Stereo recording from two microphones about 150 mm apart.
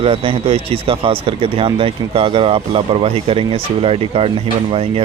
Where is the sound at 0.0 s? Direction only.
40° right (ahead or behind).